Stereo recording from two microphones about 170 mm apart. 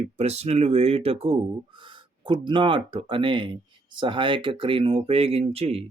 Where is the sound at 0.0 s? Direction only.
40° right (ahead or behind).